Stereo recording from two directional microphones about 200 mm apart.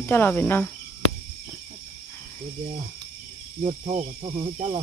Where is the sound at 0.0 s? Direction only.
10° left (ahead or behind).